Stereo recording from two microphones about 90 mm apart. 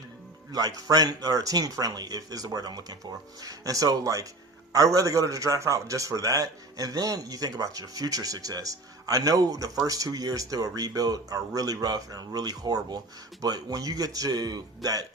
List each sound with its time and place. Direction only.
0.5 s a man's voice: 45° right (ahead or behind)